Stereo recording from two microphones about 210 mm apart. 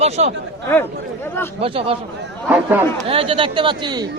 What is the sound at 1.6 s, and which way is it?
Speech, 25° right (ahead or behind).